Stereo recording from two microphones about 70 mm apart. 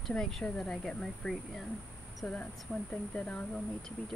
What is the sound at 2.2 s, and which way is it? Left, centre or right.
Speech, centre.